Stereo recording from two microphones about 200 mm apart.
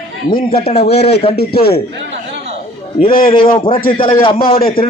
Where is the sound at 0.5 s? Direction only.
30° left (ahead or behind).